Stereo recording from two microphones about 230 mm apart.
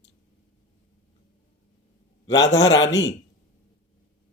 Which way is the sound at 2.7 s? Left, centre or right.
Left.